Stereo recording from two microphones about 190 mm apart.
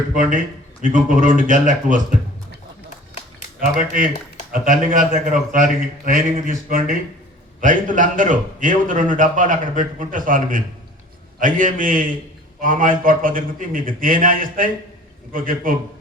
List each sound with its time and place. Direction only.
0.1 s a man's voice: 45° right (ahead or behind)
4.5 s a man's voice: 45° right (ahead or behind)